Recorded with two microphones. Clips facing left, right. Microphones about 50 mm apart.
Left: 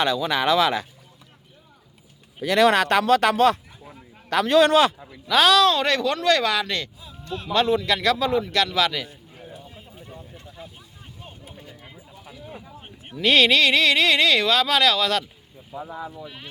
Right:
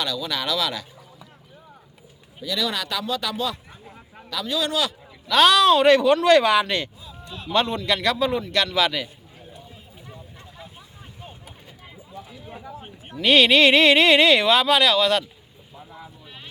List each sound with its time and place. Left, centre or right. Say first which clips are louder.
0.0 s speech: left 6 dB; left
2.4 s speech: left 9 dB; left
5.3 s speech: right 1 dB; centre
7.5 s speech: left 1 dB; centre
13.1 s speech: right 1 dB; centre
13.6 s speech: right 3 dB; right; by 15.2 s centre
15.8 s speech: left 9 dB; left